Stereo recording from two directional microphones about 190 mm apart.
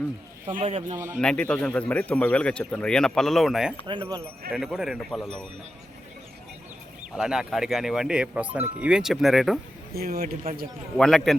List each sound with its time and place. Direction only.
0.5 s speech: 30° right (ahead or behind)
0.9 s a man's voice: 10° right (ahead or behind)
1.2 s speech: 5° left (ahead or behind)
7.2 s speech: 5° right (ahead or behind)
9.9 s speech: 55° right (ahead or behind)
10.9 s speech: centre (ahead or behind)